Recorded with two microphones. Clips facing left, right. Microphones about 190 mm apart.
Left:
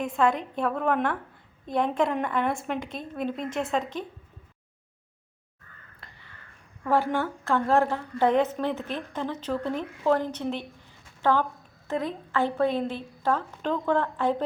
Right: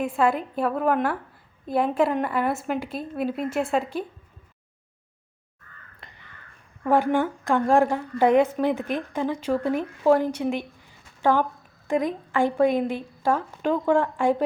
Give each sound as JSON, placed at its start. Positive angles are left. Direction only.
{"t": 0.0, "sound": "a woman's voice", "side_deg": -5}
{"t": 6.0, "sound": "crow", "side_deg": -20}
{"t": 6.8, "sound": "a woman's voice", "side_deg": -15}